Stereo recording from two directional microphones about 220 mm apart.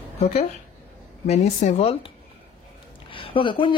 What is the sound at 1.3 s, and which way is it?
Speech, 30° left (ahead or behind).